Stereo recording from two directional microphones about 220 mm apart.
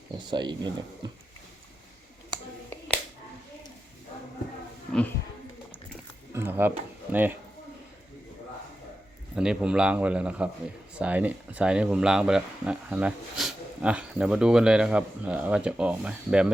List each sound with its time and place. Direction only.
0.3 s speech: 20° right (ahead or behind)
6.3 s a sound: 10° right (ahead or behind)
9.3 s speech: 5° right (ahead or behind)